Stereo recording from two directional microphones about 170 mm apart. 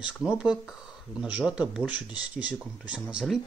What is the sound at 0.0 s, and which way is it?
Speech, 5° right (ahead or behind).